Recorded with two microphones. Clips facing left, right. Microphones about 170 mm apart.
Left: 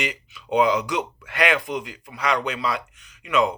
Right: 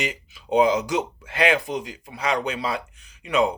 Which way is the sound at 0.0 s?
30° right (ahead or behind).